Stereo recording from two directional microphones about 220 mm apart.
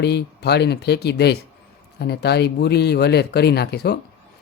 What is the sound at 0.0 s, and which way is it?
Speech, 50° left (ahead or behind).